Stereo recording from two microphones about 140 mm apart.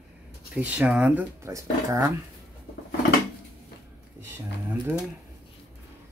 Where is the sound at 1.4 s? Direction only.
20° right (ahead or behind).